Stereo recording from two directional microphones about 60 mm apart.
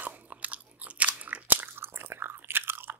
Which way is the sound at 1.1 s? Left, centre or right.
Right.